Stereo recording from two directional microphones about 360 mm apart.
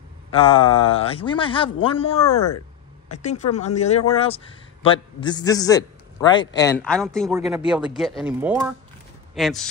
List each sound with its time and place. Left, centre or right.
0.3 s a man's voice: centre